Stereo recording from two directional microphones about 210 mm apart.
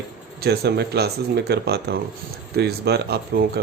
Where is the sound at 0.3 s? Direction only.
50° right (ahead or behind).